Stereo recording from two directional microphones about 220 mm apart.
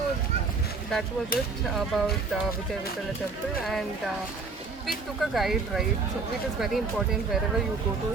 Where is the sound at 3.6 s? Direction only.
Centre (ahead or behind).